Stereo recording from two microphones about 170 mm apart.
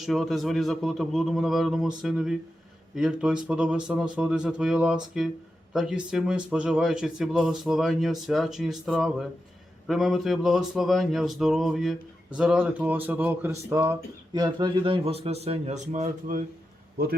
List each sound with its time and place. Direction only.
0.0 s a man's voice: centre (ahead or behind); by 16.4 s 50° right (ahead or behind)